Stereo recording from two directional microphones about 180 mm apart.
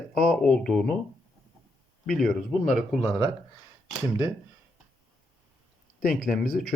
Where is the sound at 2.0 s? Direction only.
Centre (ahead or behind).